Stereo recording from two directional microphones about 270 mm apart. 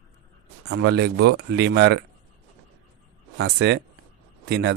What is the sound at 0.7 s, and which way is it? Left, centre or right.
Speech, right.